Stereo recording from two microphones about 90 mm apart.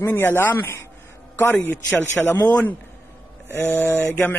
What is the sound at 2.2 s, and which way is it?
Speech, 10° left (ahead or behind).